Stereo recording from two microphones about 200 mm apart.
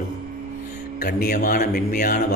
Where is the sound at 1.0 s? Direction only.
50° left (ahead or behind).